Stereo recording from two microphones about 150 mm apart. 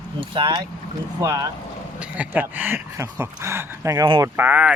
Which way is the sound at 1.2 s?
20° right (ahead or behind).